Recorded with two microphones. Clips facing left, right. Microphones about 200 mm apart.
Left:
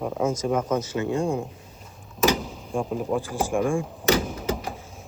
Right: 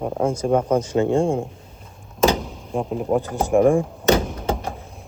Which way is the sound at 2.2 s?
30° right (ahead or behind).